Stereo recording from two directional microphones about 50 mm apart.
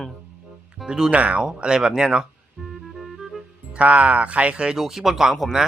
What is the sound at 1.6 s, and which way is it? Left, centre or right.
Speech, centre.